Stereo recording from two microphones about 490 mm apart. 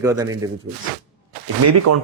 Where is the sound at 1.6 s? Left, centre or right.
Right.